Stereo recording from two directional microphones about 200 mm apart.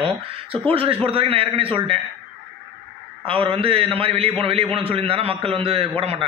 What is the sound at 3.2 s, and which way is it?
A man's voice, 30° right (ahead or behind).